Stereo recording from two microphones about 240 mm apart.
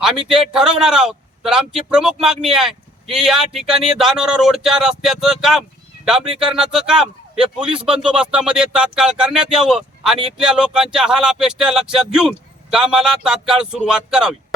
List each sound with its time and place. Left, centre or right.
0.3 s speech: centre